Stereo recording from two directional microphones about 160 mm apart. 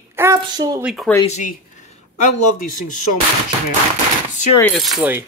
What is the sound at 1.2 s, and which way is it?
Speech, 45° left (ahead or behind).